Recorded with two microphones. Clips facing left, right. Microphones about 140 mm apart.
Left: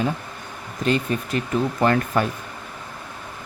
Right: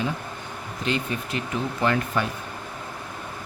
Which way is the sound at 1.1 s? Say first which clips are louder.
Left 5 dB; 45° left (ahead or behind).